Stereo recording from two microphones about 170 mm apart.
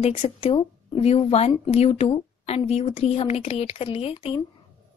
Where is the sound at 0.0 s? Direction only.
35° left (ahead or behind).